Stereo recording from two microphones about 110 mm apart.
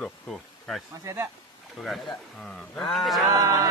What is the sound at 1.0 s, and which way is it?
Speech, 25° right (ahead or behind).